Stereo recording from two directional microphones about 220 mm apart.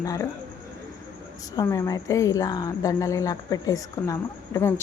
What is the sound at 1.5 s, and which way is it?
A woman's voice, 15° left (ahead or behind).